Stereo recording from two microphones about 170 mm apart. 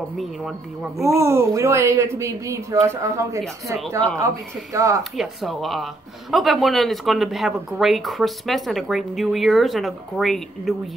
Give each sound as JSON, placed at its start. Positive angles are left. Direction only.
{"t": 0.2, "sound": "speech", "side_deg": 0}
{"t": 1.0, "sound": "speech", "side_deg": -15}
{"t": 4.7, "sound": "speech", "side_deg": -20}
{"t": 5.1, "sound": "speech", "side_deg": 0}